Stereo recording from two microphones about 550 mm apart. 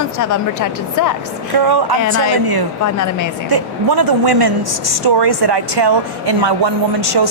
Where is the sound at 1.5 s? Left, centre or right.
Right.